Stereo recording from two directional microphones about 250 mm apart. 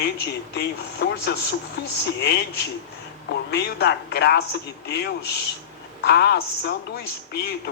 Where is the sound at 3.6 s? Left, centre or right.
Left.